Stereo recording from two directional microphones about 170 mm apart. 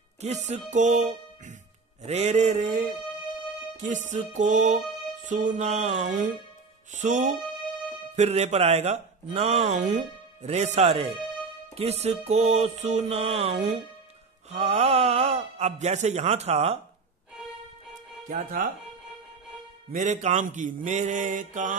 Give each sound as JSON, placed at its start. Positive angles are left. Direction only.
{"t": 0.2, "sound": "mantra", "side_deg": -40}
{"t": 2.0, "sound": "mantra", "side_deg": -40}
{"t": 4.1, "sound": "mantra", "side_deg": -45}
{"t": 8.2, "sound": "speech", "side_deg": -40}
{"t": 18.3, "sound": "mantra", "side_deg": -50}
{"t": 19.9, "sound": "mantra", "side_deg": -45}